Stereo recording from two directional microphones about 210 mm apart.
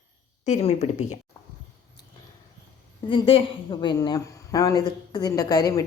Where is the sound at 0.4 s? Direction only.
30° left (ahead or behind).